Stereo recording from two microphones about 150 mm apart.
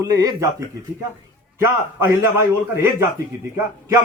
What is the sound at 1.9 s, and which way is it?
A man's voice, 20° right (ahead or behind).